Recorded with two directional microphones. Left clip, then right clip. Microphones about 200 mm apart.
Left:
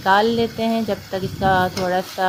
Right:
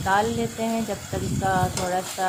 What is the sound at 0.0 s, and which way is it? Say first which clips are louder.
Speech: left 6 dB; 25° left (ahead or behind).